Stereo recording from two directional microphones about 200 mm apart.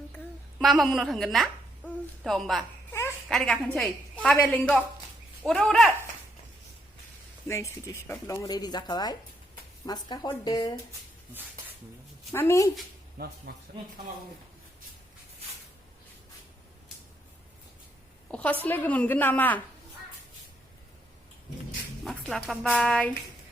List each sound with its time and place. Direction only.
0.6 s a woman's voice: centre (ahead or behind)
7.4 s speech: 15° left (ahead or behind)
12.3 s speech: 15° left (ahead or behind)
13.2 s speech: 45° right (ahead or behind)
18.3 s a woman's voice: 5° left (ahead or behind)
22.0 s a woman's voice: centre (ahead or behind)